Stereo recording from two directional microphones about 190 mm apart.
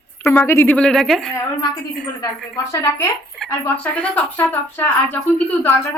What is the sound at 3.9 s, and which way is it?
Speech, 5° left (ahead or behind).